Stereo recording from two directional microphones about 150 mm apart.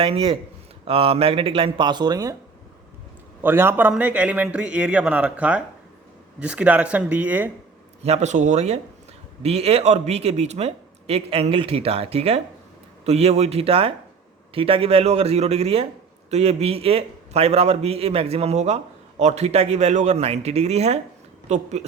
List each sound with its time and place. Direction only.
0.0 s speech: 35° right (ahead or behind)
3.4 s a man's voice: 15° right (ahead or behind)
8.0 s speech: 50° right (ahead or behind)